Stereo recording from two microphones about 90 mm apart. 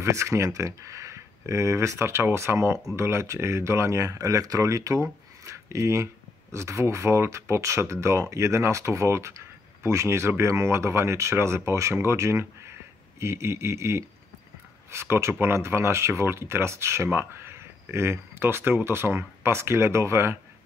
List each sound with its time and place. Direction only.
0.0 s speech: 35° right (ahead or behind)
5.4 s a sound: 35° right (ahead or behind)
6.5 s speech: 30° right (ahead or behind)